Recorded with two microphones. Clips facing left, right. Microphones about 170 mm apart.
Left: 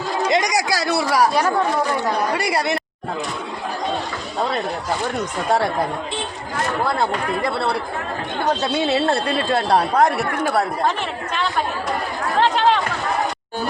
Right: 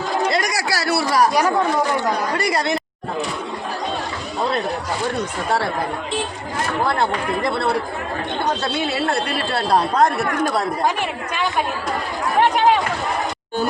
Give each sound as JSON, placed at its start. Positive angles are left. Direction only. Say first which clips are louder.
{"t": 0.3, "sound": "a sound", "louder": "left 2 dB", "side_deg": 20}
{"t": 1.3, "sound": "speech", "louder": "right 1 dB", "side_deg": -15}
{"t": 2.3, "sound": "a woman's voice", "louder": "even", "side_deg": 10}
{"t": 8.7, "sound": "speech", "louder": "left 3 dB", "side_deg": 25}
{"t": 12.4, "sound": "speech", "louder": "right 1 dB", "side_deg": -15}